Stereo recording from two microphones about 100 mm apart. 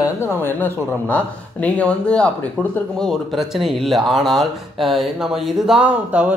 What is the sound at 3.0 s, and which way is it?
Speech, centre (ahead or behind).